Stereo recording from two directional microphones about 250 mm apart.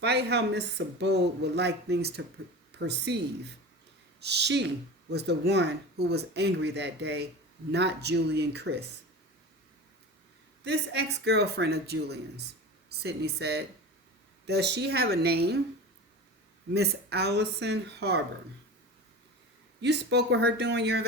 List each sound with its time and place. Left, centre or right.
0.0 s speech: right
10.6 s speech: right
16.7 s speech: right
19.8 s speech: right